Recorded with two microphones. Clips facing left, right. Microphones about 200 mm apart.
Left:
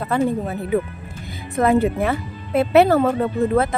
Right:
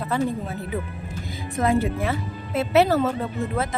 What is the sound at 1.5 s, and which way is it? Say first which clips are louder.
A woman's voice: left 5 dB; 60° left (ahead or behind).